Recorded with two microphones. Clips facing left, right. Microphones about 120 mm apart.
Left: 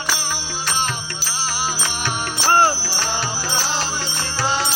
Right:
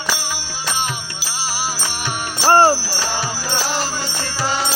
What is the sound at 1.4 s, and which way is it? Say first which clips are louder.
Music: right 1 dB; 10° right (ahead or behind).